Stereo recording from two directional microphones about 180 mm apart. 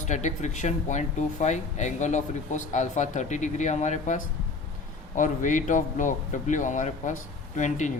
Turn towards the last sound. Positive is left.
turn(degrees=40)  # may be behind; listen again after turning